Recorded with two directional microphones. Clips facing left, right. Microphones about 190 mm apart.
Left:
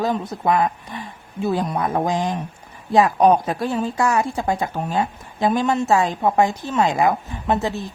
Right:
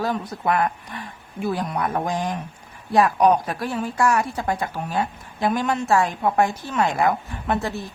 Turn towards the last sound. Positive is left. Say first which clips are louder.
# left 3 dB
turn(degrees=20)  # may be behind; listen again after turning